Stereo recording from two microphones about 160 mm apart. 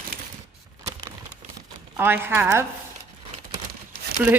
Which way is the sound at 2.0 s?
15° right (ahead or behind).